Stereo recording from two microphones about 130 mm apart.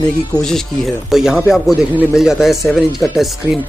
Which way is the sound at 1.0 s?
5° right (ahead or behind).